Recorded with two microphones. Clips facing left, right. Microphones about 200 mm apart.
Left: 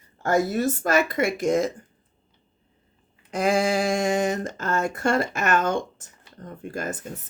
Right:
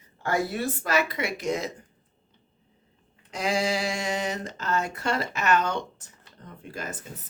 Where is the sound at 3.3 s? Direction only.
50° left (ahead or behind).